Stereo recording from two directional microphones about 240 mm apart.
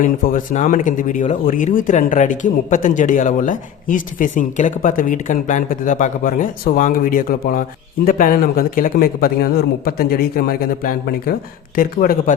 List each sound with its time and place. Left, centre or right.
0.0 s speech: left